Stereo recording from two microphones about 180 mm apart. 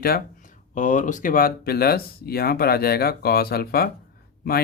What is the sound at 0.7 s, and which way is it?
Speech, 45° left (ahead or behind).